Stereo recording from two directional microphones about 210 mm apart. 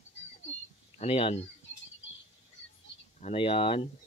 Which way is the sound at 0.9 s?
30° left (ahead or behind).